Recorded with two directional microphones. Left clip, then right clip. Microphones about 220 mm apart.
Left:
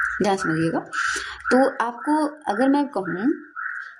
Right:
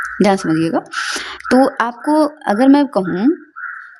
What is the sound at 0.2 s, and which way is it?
Speech, 45° right (ahead or behind).